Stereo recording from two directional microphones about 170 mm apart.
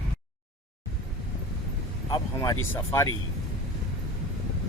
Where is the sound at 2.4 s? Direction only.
20° left (ahead or behind).